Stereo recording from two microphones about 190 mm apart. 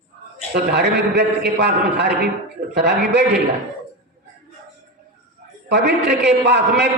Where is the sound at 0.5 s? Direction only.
60° right (ahead or behind).